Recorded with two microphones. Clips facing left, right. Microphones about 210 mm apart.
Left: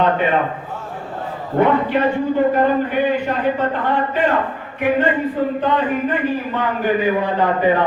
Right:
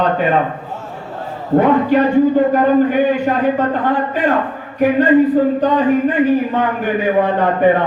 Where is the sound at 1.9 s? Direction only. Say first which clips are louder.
Right 5 dB; 40° right (ahead or behind).